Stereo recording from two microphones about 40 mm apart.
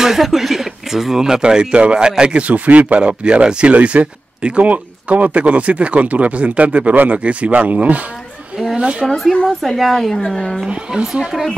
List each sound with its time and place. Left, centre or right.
0.0 s speech: centre; by 8.0 s right
9.0 s speech: centre
10.7 s speech: right